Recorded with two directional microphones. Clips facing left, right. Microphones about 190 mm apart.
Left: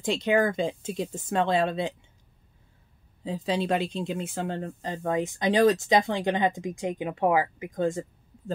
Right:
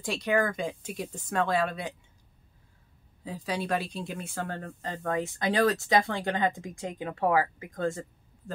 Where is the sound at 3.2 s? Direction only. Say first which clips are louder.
Left 5 dB; 25° left (ahead or behind).